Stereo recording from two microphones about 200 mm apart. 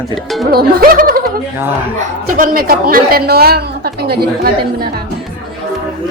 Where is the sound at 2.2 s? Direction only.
45° right (ahead or behind).